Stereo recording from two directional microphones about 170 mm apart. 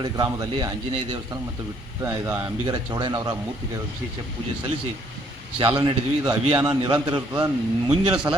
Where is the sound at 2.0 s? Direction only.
15° right (ahead or behind).